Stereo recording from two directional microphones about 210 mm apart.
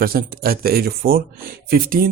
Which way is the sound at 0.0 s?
45° right (ahead or behind).